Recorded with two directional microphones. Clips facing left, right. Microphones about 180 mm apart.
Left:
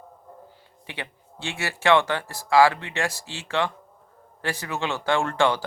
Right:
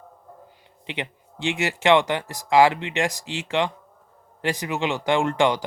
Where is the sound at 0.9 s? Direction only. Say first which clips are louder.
Right 5 dB; 20° right (ahead or behind).